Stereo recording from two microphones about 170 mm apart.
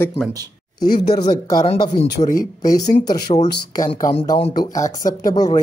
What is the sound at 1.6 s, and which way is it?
Speech, 35° left (ahead or behind).